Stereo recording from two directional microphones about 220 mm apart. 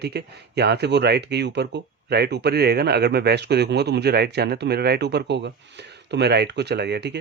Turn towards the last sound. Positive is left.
turn(degrees=-50)  # may be behind; listen again after turning